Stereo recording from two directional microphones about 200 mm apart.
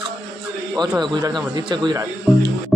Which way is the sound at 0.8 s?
20° right (ahead or behind).